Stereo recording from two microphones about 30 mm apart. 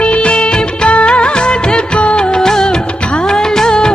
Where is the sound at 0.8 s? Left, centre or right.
Left.